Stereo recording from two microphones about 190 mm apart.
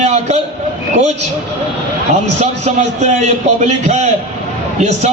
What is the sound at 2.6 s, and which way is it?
A man's voice, 40° right (ahead or behind).